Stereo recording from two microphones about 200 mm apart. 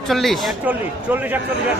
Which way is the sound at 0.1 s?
Centre (ahead or behind).